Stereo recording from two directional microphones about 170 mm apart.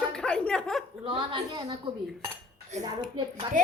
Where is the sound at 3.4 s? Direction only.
30° right (ahead or behind).